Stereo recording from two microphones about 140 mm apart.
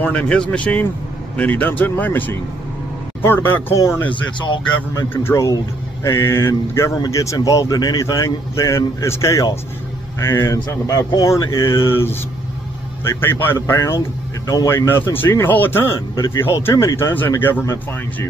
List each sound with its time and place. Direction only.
0.0 s speech: 10° left (ahead or behind)
4.1 s speech: 35° left (ahead or behind)
4.9 s speech: 20° left (ahead or behind)